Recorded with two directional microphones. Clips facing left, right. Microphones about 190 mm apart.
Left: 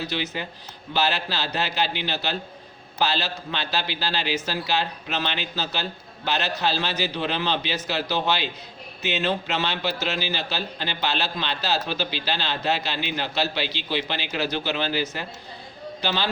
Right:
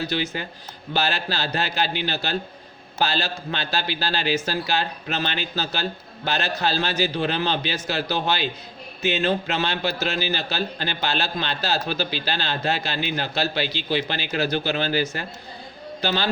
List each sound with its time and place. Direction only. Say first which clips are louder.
0.1 s a man's voice: right 2 dB; 45° right (ahead or behind)